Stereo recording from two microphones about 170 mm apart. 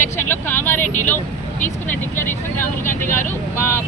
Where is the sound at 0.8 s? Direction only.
50° left (ahead or behind).